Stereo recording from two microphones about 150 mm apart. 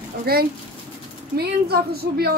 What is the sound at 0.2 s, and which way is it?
A woman's voice, 90° right.